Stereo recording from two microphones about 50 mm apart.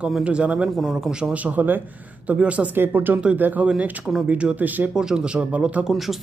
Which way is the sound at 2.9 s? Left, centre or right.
Right.